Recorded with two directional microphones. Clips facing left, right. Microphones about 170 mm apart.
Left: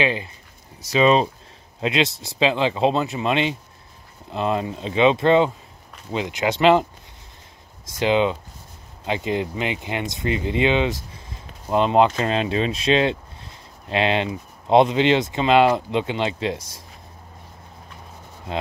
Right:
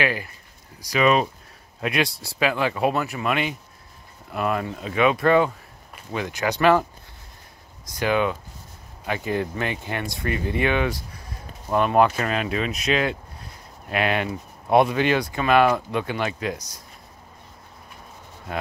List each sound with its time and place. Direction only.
0.0 s speech: 20° left (ahead or behind)